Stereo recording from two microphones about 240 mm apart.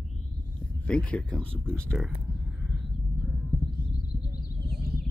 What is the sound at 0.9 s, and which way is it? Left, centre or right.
Speech, centre.